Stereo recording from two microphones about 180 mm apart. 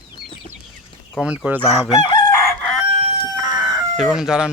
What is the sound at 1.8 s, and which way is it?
Chicken, 20° left (ahead or behind).